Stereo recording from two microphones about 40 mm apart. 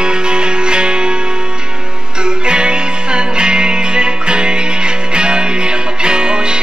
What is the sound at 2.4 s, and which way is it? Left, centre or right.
Music, right.